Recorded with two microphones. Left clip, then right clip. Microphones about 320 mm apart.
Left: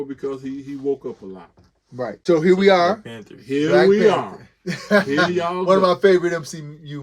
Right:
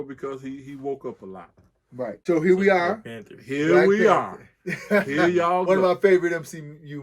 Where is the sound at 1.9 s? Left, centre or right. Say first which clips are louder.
Left 5 dB; centre.